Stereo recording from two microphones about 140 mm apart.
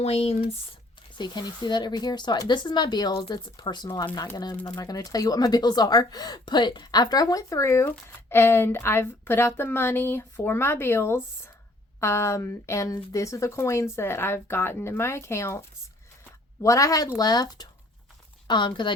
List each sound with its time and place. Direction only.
0.0 s speech: 45° left (ahead or behind)
1.2 s a woman's voice: 30° left (ahead or behind)
16.6 s a woman's voice: 25° left (ahead or behind)